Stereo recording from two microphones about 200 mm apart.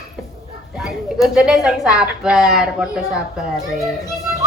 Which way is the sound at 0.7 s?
Centre (ahead or behind).